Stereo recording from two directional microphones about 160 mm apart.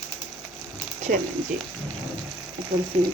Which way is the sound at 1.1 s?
60° right (ahead or behind).